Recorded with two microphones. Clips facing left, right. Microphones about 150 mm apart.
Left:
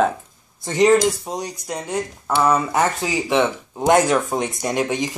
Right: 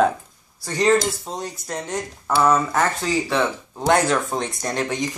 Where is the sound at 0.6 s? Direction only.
20° left (ahead or behind).